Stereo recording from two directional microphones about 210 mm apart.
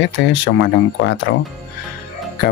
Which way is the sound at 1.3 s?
55° left (ahead or behind).